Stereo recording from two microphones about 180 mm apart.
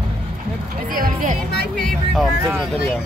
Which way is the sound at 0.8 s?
45° right (ahead or behind).